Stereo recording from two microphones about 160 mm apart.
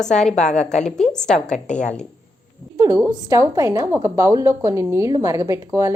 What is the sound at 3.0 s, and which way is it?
A woman's voice, 20° right (ahead or behind).